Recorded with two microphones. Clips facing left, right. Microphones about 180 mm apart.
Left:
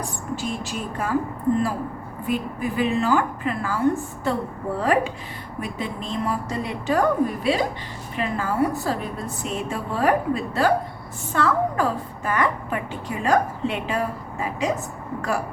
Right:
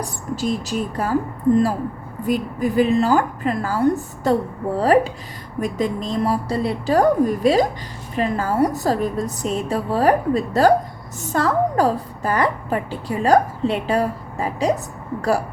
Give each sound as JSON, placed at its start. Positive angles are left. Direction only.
{"t": 0.0, "sound": "a woman's voice", "side_deg": -40}
{"t": 2.2, "sound": "a woman's voice", "side_deg": -40}